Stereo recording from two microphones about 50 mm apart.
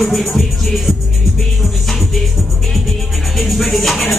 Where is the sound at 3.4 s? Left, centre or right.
Centre.